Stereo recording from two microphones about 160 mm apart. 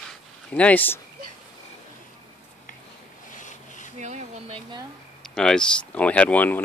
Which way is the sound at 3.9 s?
45° right (ahead or behind).